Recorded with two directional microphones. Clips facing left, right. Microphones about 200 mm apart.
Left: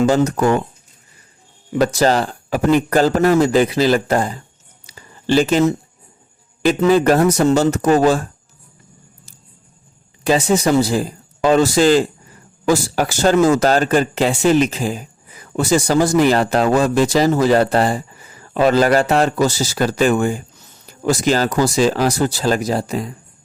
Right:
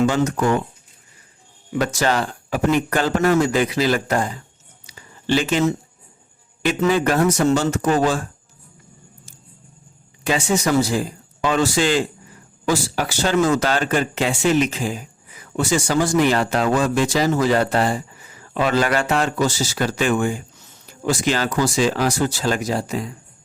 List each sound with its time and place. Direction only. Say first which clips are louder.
0.0 s speech: left 4 dB; 40° left (ahead or behind)
1.8 s speech: left 5 dB; 35° left (ahead or behind)
4.9 s a sound: left 3 dB; 40° left (ahead or behind)
6.7 s speech: left 5 dB; 35° left (ahead or behind)
10.2 s speech: left 5 dB; 35° left (ahead or behind)